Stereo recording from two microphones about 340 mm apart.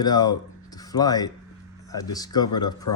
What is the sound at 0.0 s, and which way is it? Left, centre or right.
Speech, centre.